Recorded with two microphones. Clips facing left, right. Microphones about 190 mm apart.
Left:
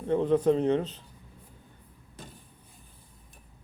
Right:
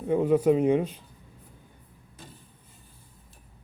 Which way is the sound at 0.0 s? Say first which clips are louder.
Right 2 dB; 10° right (ahead or behind).